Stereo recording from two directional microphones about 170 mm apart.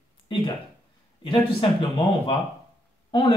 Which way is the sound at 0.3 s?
30° left (ahead or behind).